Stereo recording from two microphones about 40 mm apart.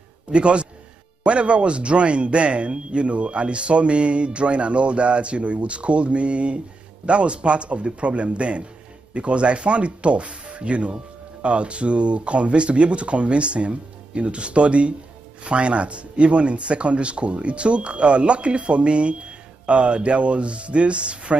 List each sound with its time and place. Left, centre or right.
0.3 s speech: right